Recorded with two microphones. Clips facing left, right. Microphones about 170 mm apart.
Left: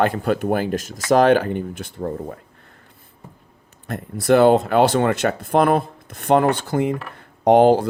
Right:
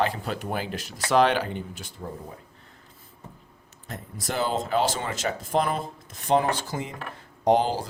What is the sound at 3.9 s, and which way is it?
Speech, 65° left (ahead or behind).